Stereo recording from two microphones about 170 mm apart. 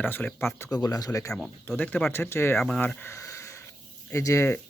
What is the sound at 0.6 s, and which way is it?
Speech, 20° left (ahead or behind).